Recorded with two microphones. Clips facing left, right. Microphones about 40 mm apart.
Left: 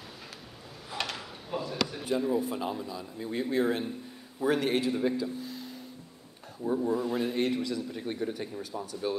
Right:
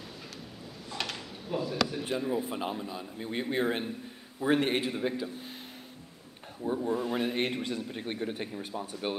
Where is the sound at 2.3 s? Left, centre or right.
Right.